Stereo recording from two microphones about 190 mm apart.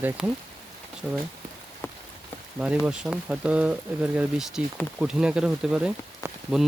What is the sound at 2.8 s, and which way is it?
Speech, 5° right (ahead or behind).